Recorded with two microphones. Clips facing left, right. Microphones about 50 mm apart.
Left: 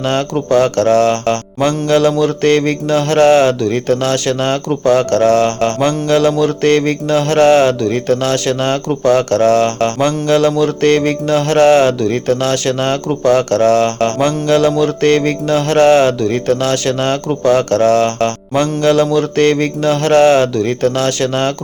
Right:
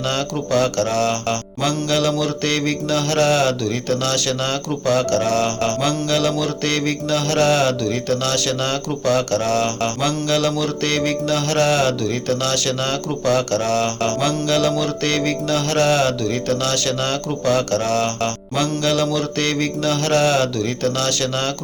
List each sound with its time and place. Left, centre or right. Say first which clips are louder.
0.0 s mantra: left 6 dB; left